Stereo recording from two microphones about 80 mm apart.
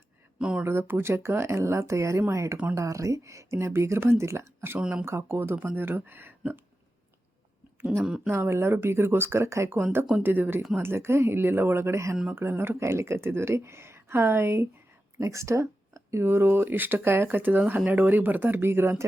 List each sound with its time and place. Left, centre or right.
0.3 s speech: centre
0.6 s speech: right
4.8 s speech: centre
5.0 s speech: right
8.0 s speech: centre
8.3 s speech: right